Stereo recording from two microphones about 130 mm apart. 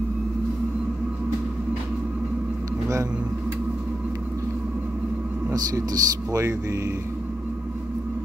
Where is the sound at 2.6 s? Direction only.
25° right (ahead or behind).